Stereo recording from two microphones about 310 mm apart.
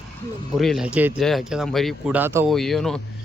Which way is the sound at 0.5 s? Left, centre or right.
Centre.